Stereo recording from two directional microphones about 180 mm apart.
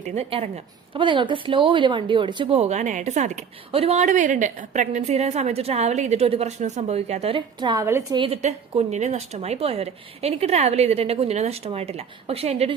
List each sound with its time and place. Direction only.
0.1 s a woman's voice: 35° right (ahead or behind); by 8.2 s 15° right (ahead or behind)
8.2 s a woman's voice: 35° right (ahead or behind)